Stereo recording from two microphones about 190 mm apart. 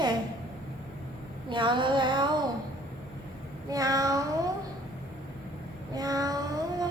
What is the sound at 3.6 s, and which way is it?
Child singing, 20° right (ahead or behind).